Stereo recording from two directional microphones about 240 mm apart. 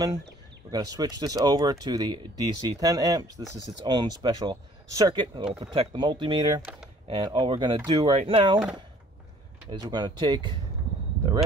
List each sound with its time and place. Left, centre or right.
0.7 s speech: centre
9.7 s speech: centre